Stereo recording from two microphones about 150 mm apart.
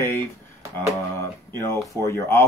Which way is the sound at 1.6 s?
20° left (ahead or behind).